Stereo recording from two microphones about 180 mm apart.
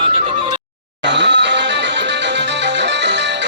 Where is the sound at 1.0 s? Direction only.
75° right (ahead or behind).